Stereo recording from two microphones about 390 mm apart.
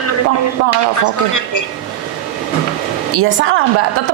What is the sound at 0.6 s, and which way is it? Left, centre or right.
Speech, right.